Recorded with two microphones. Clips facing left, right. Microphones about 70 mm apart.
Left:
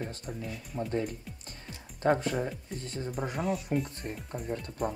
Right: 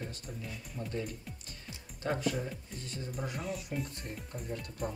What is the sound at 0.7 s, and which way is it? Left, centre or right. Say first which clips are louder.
Speech: left 7 dB; left.